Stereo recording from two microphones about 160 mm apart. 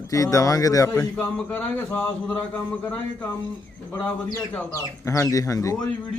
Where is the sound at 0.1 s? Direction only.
20° left (ahead or behind).